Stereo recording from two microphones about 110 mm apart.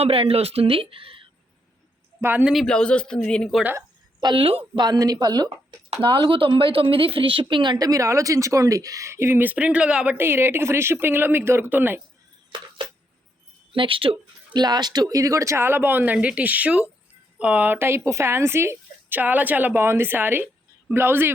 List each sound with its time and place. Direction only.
0.0 s speech: 60° right (ahead or behind)
2.2 s speech: 15° right (ahead or behind)
2.5 s speech: 5° left (ahead or behind)
4.2 s a woman's voice: 45° right (ahead or behind)
4.8 s a woman's voice: 35° right (ahead or behind)
6.0 s a woman's voice: 50° right (ahead or behind); by 10.2 s 10° right (ahead or behind)
10.2 s speech: 20° right (ahead or behind)
12.5 s a sound: 45° right (ahead or behind)
13.7 s speech: 50° right (ahead or behind)
14.6 s speech: 40° right (ahead or behind); by 21.3 s 20° right (ahead or behind)